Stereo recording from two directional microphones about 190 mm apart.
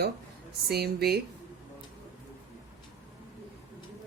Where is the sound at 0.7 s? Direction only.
55° right (ahead or behind).